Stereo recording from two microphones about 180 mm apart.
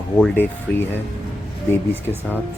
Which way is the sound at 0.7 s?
10° left (ahead or behind).